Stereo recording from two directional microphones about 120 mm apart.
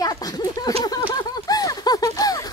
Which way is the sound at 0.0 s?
30° left (ahead or behind).